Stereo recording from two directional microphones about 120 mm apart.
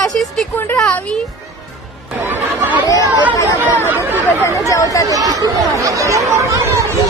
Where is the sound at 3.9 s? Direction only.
15° right (ahead or behind).